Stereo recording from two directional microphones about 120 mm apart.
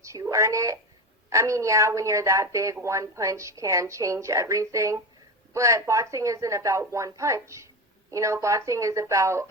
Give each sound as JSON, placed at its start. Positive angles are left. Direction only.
{"t": 0.0, "sound": "a woman's voice", "side_deg": -25}